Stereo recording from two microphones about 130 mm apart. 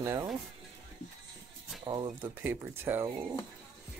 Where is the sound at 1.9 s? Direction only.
30° right (ahead or behind).